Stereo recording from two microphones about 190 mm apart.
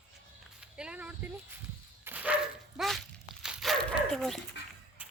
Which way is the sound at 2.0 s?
10° right (ahead or behind).